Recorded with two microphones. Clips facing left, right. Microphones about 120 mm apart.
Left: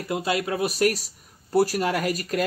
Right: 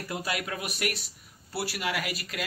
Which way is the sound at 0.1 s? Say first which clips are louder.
Left 8 dB; 25° left (ahead or behind).